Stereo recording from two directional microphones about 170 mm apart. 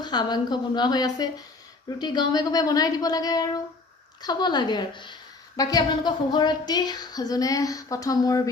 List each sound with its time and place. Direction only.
0.0 s speech: 25° left (ahead or behind)